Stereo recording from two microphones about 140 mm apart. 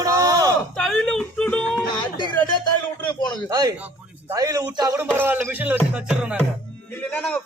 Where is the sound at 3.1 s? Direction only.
30° left (ahead or behind).